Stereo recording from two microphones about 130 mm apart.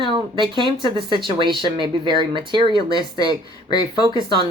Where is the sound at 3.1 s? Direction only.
30° left (ahead or behind).